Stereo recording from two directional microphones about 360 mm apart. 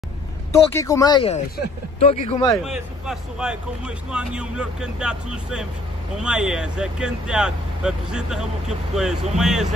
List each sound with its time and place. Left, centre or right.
0.5 s speech: centre
2.6 s speech: centre